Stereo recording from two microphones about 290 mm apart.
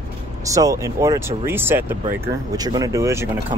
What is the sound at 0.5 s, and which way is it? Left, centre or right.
Speech, centre.